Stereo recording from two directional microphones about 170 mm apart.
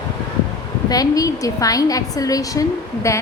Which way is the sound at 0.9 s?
20° left (ahead or behind).